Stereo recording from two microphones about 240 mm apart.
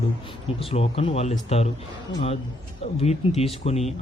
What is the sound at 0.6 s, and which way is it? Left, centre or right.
Speech, left.